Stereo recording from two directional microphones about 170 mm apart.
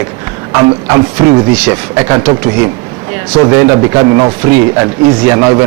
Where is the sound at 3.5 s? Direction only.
15° right (ahead or behind).